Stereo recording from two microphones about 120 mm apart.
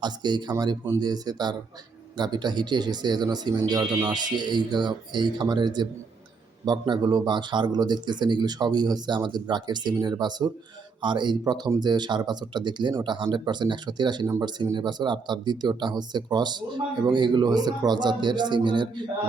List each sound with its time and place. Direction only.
0.0 s speech: 35° right (ahead or behind)